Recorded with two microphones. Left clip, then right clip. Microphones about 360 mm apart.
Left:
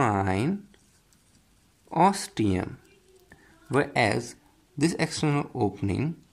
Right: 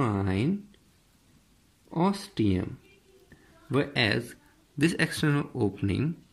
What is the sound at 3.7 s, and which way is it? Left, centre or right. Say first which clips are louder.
Speech: left 3 dB; centre.